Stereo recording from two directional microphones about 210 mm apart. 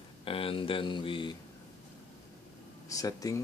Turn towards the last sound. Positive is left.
turn(degrees=15)  # may be behind; listen again after turning